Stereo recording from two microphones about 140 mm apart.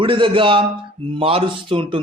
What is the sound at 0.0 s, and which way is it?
Speech, 35° right (ahead or behind).